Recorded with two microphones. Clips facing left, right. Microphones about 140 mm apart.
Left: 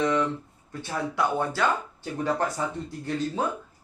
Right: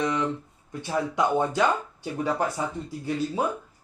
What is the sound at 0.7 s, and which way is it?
Speech, 15° right (ahead or behind).